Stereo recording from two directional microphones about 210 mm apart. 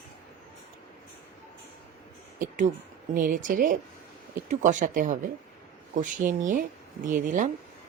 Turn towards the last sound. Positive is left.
turn(degrees=-40)  # may be behind; listen again after turning